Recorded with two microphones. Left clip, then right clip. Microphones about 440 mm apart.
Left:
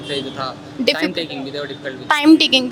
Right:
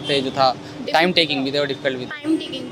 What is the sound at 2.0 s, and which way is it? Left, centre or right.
Speech, left.